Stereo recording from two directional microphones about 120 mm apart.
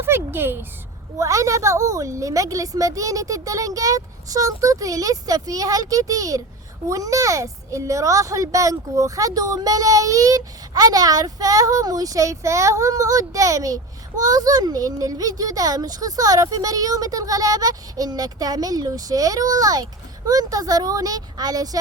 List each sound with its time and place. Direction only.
0.0 s a child's voice: 20° right (ahead or behind)